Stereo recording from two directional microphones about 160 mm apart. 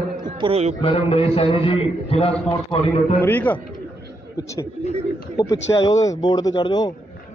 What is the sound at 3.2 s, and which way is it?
Speech, 10° left (ahead or behind).